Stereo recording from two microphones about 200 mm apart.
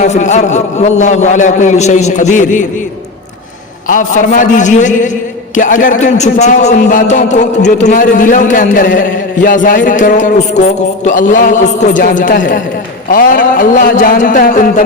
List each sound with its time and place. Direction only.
0.0 s a man's voice: 35° left (ahead or behind)
3.8 s a man's voice: 40° left (ahead or behind)